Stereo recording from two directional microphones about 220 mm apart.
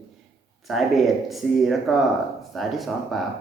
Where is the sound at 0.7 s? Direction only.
Centre (ahead or behind).